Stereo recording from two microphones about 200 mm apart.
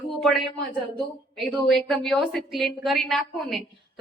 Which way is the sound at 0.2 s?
Centre (ahead or behind).